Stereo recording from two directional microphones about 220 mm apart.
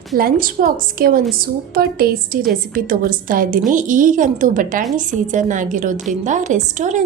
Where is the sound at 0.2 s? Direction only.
40° right (ahead or behind).